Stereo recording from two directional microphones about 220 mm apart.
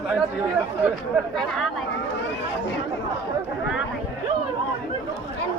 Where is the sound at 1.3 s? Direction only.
Centre (ahead or behind).